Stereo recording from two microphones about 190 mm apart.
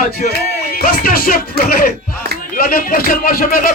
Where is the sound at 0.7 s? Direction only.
50° left (ahead or behind).